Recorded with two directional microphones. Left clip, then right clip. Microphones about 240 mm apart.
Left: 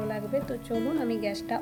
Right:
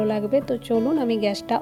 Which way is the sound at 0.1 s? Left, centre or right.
Right.